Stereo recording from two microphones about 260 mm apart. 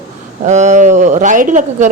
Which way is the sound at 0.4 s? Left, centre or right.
Right.